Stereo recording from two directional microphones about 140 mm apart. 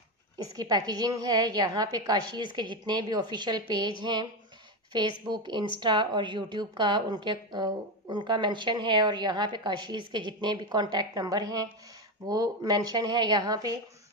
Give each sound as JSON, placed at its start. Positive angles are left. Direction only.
{"t": 0.6, "sound": "a woman's voice", "side_deg": -30}